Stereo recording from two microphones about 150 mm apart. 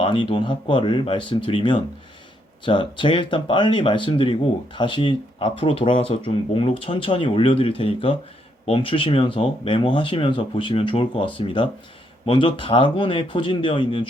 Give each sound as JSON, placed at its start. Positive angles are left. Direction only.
{"t": 0.0, "sound": "speech", "side_deg": 35}